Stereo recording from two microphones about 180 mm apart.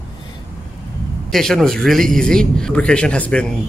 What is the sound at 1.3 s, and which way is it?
Speech, centre (ahead or behind).